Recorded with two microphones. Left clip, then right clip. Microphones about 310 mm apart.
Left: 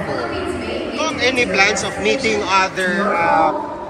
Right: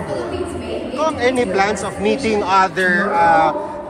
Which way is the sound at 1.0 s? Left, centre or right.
Right.